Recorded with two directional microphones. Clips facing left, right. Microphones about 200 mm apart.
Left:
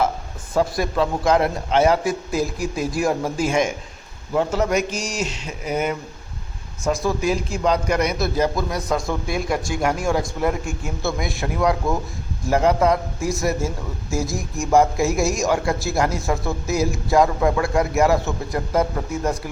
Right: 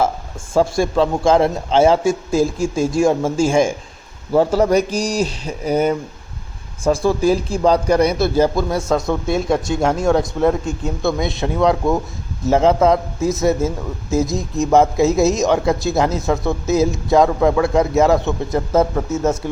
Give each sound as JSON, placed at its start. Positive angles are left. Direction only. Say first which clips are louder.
{"t": 0.5, "sound": "a man's voice", "louder": "right 5 dB", "side_deg": -30}